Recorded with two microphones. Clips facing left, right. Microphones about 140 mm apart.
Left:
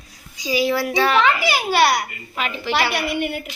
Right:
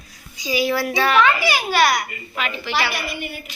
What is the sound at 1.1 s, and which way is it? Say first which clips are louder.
A child's voice: right 2 dB; 25° left (ahead or behind).